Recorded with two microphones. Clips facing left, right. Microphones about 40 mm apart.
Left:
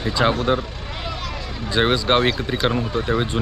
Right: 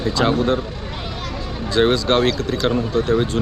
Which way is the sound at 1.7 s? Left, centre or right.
Centre.